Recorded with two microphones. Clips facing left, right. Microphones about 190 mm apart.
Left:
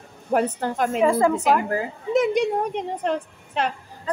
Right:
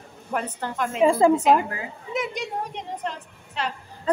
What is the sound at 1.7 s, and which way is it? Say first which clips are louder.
A woman's voice: left 9 dB; 50° left (ahead or behind).